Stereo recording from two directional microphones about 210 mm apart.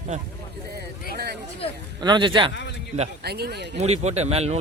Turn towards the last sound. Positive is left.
turn(degrees=-30)  # may be behind; listen again after turning